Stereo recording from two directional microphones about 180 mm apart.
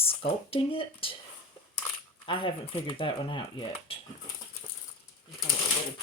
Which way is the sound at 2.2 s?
30° left (ahead or behind).